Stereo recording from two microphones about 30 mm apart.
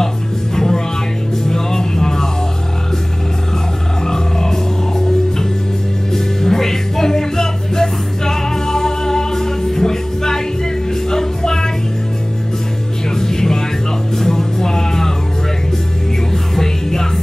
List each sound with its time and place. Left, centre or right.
0.6 s music: centre
4.0 s music: centre
13.1 s music: centre
16.5 s music: centre